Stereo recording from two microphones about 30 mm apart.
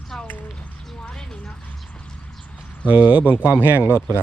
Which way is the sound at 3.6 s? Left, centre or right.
Right.